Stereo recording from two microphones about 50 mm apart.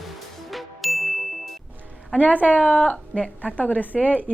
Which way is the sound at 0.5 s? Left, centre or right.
Centre.